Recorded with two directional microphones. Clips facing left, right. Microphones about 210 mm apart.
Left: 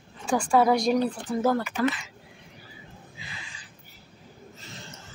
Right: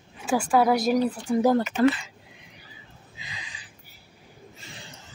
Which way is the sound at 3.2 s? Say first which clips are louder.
Right 3 dB; 20° right (ahead or behind).